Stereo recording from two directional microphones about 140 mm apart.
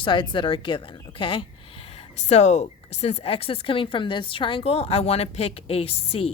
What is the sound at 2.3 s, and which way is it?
A woman's voice, 55° left (ahead or behind).